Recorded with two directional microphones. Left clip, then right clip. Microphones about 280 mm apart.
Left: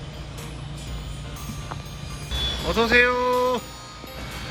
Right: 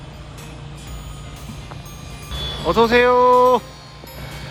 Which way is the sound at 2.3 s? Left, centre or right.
Right.